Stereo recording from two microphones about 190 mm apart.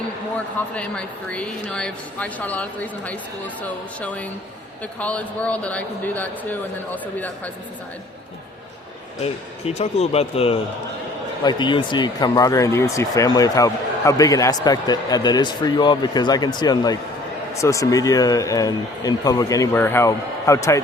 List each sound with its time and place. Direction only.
0.7 s speech: 5° left (ahead or behind)
9.2 s speech: 35° left (ahead or behind); by 20.8 s 15° left (ahead or behind)